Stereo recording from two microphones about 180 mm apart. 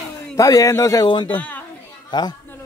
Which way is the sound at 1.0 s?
30° left (ahead or behind).